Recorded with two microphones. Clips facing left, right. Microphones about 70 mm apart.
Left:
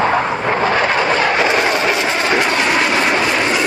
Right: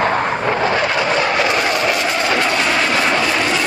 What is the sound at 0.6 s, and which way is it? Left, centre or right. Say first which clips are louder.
Vehicle: left 4 dB; left.